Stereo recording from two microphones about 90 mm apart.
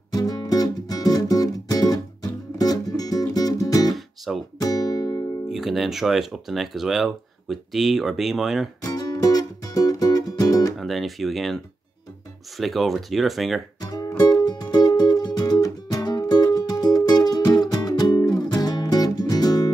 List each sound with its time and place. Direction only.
0.1 s music: 45° left (ahead or behind)
5.5 s speech: centre (ahead or behind)
8.8 s music: 45° left (ahead or behind)
10.8 s speech: centre (ahead or behind)
13.7 s music: 45° left (ahead or behind)